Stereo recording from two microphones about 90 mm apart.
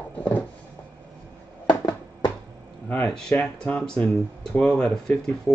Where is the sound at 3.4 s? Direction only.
10° left (ahead or behind).